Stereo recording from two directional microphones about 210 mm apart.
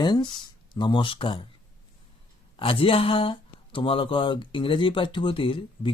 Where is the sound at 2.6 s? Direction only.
25° left (ahead or behind).